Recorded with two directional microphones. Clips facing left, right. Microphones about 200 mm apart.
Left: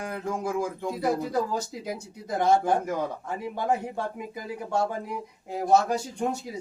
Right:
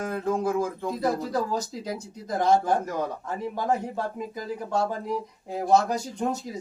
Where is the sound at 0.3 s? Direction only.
15° left (ahead or behind).